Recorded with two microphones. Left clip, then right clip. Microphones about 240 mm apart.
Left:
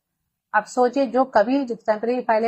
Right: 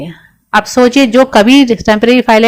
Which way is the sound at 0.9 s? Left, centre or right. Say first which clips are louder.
Right 12 dB; right.